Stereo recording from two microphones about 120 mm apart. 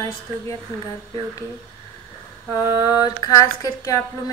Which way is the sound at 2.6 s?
30° right (ahead or behind).